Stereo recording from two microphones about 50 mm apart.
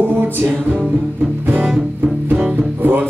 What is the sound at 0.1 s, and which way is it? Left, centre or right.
Music, right.